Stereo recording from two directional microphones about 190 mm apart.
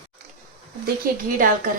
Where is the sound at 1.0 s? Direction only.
45° right (ahead or behind).